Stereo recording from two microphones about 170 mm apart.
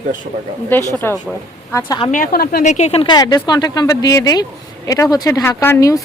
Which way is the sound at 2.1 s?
55° left (ahead or behind).